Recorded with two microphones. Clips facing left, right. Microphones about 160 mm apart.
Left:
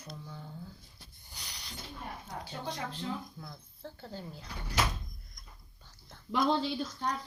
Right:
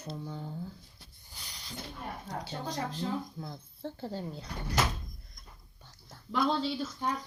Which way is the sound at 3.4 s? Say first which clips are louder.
Right 6 dB; 30° right (ahead or behind).